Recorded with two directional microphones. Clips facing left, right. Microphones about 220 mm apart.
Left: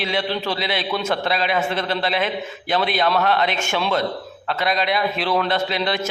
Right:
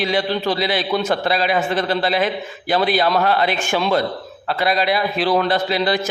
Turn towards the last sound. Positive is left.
turn(degrees=-5)  # may be behind; listen again after turning